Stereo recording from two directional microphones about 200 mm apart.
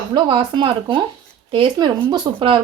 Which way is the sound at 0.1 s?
25° right (ahead or behind).